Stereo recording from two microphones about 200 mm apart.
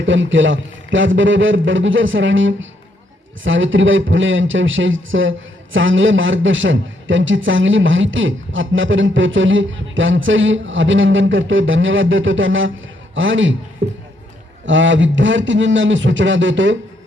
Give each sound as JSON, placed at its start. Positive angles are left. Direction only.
{"t": 0.0, "sound": "a man's voice", "side_deg": -70}
{"t": 13.8, "sound": "speech", "side_deg": -50}
{"t": 14.7, "sound": "a man's voice", "side_deg": -70}